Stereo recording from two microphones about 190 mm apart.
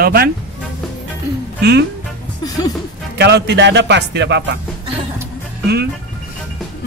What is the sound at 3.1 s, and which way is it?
Speech, 65° right (ahead or behind).